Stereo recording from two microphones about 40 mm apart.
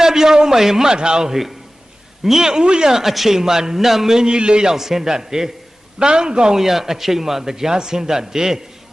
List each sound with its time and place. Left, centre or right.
0.0 s a man's voice: centre
3.0 s a man's voice: centre; by 4.7 s right
4.7 s a man's voice: centre
6.6 s a man's voice: centre